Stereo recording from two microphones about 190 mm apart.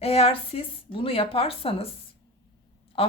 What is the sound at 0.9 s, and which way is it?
Speech, 30° left (ahead or behind).